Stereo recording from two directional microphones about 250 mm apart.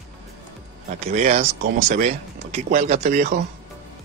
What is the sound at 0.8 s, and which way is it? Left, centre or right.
Speech, right.